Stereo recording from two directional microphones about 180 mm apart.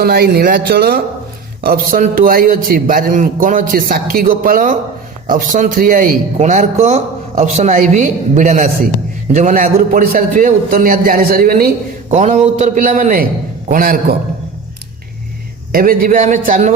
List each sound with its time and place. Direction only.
0.0 s speech: 60° right (ahead or behind)
12.1 s speech: 40° right (ahead or behind)
15.7 s speech: 55° right (ahead or behind)